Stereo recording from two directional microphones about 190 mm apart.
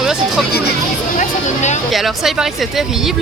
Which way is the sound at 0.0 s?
Centre (ahead or behind).